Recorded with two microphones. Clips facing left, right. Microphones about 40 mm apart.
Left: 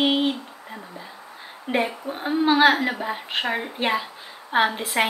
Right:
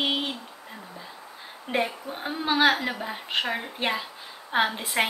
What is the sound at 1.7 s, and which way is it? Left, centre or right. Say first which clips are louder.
A woman's voice: left 3 dB; centre.